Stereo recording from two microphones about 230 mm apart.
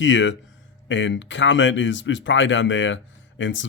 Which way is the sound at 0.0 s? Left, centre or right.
Left.